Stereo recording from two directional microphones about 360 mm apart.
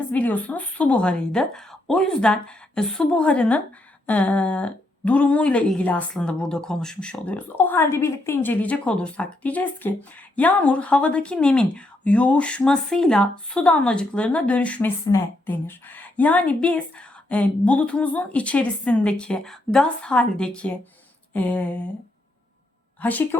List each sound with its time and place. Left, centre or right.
0.1 s speech: centre
23.0 s speech: centre